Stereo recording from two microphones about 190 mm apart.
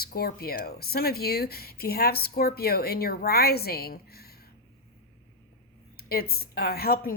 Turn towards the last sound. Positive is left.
turn(degrees=55)  # may be behind; listen again after turning